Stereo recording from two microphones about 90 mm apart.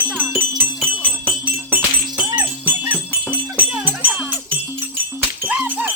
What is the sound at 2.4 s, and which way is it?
Music, 20° right (ahead or behind).